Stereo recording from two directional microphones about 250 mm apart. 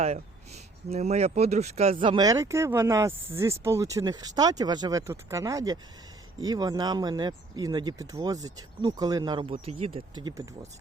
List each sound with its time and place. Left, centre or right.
0.9 s speech: right